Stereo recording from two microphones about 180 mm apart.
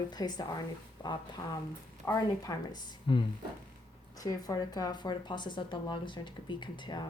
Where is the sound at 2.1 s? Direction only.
20° left (ahead or behind).